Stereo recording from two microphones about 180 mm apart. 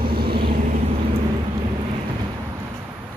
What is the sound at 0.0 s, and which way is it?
Vehicle, 60° right (ahead or behind).